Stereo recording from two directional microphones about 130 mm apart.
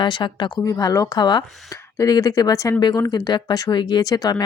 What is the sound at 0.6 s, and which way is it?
A woman's voice, 25° left (ahead or behind).